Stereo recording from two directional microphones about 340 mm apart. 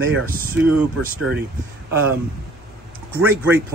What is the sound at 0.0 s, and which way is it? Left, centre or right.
Speech, right.